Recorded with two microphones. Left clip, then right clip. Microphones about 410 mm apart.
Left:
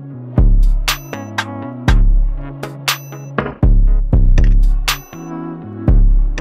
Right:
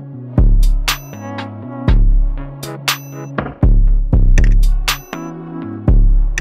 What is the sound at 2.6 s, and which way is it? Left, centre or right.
Music, centre.